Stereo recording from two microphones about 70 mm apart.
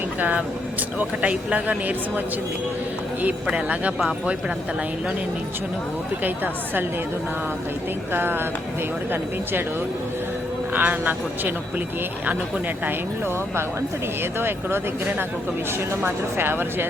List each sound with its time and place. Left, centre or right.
0.2 s speech: right
6.2 s speech: right
8.1 s speech: right
10.8 s speech: right
14.3 s speech: right
16.0 s speech: right